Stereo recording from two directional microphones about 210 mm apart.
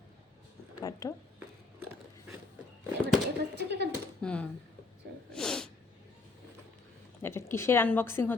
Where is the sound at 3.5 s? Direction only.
55° right (ahead or behind).